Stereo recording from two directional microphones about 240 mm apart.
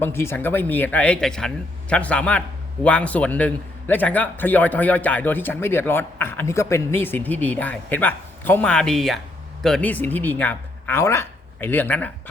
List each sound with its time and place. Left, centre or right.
0.0 s a man's voice: centre